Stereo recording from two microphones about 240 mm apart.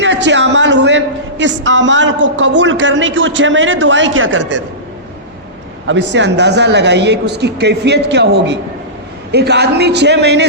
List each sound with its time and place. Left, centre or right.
0.0 s a man's voice: right
5.9 s a man's voice: right